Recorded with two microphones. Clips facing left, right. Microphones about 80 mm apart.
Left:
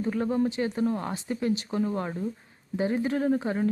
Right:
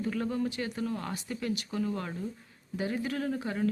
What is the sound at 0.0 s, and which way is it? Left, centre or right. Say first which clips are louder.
Speech: left 5 dB; left.